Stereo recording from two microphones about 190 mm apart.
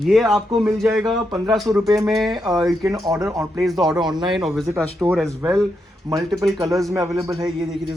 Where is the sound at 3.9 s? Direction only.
20° right (ahead or behind).